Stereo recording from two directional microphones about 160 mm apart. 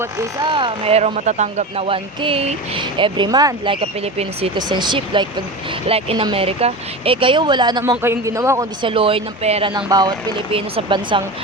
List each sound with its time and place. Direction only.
0.0 s speech: 15° right (ahead or behind)
0.5 s speech: 35° right (ahead or behind)
4.5 s speech: 30° right (ahead or behind)
8.8 s speech: 35° right (ahead or behind)
9.7 s speech: 25° right (ahead or behind)